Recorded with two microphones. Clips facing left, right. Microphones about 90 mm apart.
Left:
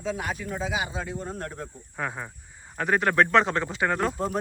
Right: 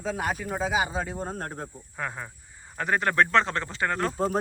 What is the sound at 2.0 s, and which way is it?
Speech, centre (ahead or behind).